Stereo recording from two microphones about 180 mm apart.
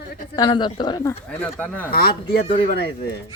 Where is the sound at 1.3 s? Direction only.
10° left (ahead or behind).